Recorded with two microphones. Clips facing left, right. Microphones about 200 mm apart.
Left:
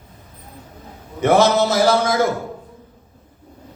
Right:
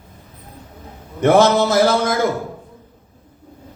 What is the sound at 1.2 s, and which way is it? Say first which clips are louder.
Speech: right 2 dB; 50° right (ahead or behind).